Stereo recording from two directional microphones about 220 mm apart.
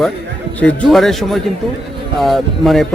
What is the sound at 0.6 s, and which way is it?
Speech, 5° left (ahead or behind).